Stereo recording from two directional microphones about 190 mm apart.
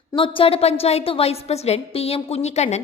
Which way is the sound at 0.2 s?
30° left (ahead or behind).